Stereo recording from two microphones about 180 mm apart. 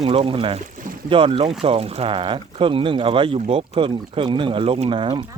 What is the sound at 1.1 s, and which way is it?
Speech, 30° right (ahead or behind).